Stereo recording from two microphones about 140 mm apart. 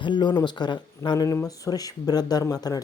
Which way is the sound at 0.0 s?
35° left (ahead or behind).